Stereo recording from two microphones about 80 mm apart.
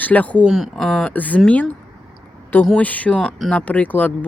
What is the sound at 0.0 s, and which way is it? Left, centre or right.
Speech, centre.